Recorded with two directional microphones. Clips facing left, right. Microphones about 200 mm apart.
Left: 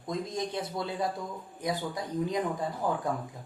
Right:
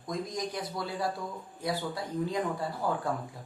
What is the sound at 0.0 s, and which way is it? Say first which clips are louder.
Speech: left 1 dB; 25° left (ahead or behind).